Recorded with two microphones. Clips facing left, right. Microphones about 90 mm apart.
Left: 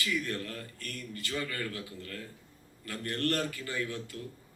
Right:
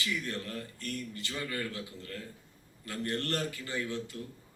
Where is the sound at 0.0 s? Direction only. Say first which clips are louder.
Left 2 dB; 20° right (ahead or behind).